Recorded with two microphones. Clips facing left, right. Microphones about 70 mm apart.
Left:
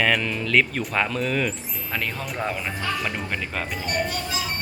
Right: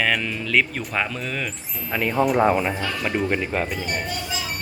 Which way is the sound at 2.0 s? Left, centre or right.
Centre.